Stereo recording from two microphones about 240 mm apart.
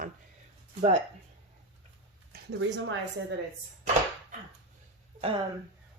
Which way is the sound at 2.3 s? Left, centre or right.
Right.